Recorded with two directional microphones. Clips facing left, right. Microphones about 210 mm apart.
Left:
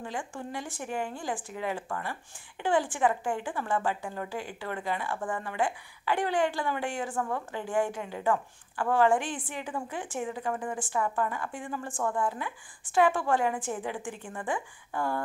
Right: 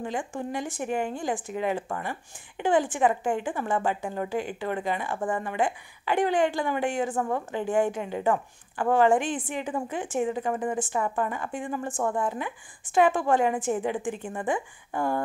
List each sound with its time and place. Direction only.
0.0 s speech: 20° right (ahead or behind)